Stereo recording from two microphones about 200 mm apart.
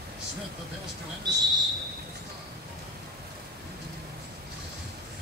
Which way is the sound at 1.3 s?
20° right (ahead or behind).